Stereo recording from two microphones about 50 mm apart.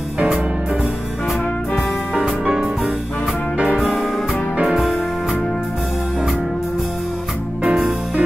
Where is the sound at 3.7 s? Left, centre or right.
Centre.